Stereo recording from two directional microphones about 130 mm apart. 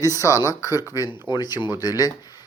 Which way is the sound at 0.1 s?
25° left (ahead or behind).